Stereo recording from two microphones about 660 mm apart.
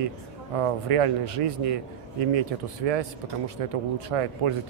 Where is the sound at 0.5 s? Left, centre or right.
Right.